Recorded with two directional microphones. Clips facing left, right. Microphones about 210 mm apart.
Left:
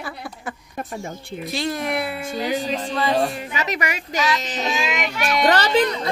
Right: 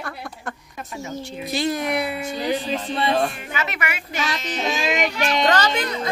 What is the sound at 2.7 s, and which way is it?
A woman's voice, 40° left (ahead or behind).